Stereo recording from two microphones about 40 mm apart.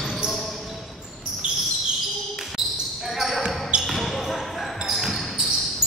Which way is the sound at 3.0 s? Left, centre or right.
Centre.